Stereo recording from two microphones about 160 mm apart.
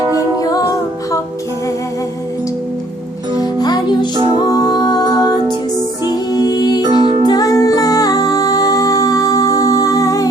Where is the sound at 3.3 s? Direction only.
25° left (ahead or behind).